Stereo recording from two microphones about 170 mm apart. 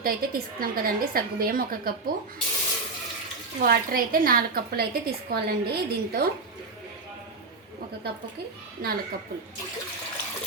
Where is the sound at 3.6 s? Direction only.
60° right (ahead or behind).